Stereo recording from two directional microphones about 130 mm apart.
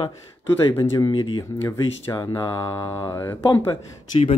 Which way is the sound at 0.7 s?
30° left (ahead or behind).